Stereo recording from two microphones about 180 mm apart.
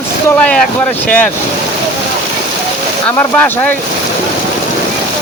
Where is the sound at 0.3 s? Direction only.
5° left (ahead or behind).